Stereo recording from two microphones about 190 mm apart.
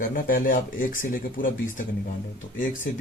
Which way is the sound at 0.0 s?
45° left (ahead or behind).